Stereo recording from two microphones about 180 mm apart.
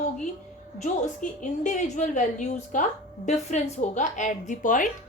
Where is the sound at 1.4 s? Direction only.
45° left (ahead or behind).